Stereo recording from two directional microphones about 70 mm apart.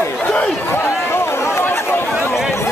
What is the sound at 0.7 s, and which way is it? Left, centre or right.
Chatter, left.